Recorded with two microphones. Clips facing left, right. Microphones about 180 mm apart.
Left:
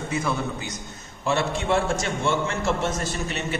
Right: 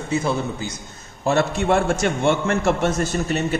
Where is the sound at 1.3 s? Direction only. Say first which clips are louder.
Right 5 dB; 50° right (ahead or behind).